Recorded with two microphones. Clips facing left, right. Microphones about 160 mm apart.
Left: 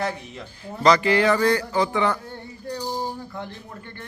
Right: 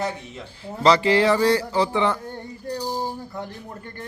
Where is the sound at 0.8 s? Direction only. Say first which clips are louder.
Right 1 dB; 25° right (ahead or behind).